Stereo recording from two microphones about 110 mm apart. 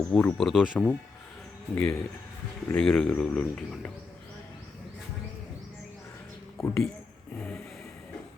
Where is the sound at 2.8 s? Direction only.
5° left (ahead or behind).